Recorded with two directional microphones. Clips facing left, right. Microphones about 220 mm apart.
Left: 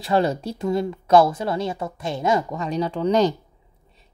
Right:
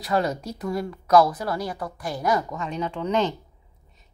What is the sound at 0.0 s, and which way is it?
Speech, 30° left (ahead or behind).